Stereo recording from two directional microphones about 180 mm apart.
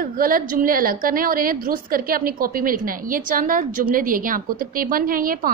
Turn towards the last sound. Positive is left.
turn(degrees=-50)  # may be behind; listen again after turning